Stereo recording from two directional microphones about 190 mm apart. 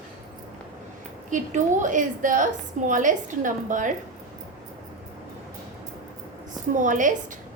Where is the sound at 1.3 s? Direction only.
40° right (ahead or behind).